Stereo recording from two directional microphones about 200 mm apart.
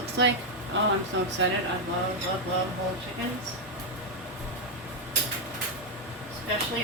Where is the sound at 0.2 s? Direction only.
65° right (ahead or behind).